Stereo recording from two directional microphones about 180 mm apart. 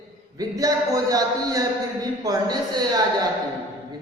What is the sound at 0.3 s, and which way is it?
A man's voice, 20° right (ahead or behind).